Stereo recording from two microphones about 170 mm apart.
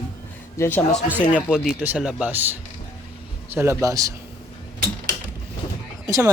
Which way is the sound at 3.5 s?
15° right (ahead or behind).